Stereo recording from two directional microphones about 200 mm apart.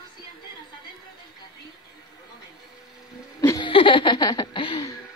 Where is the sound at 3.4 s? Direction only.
20° left (ahead or behind).